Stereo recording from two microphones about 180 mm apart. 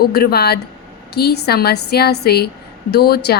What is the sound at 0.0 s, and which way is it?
A woman's voice, 60° left (ahead or behind).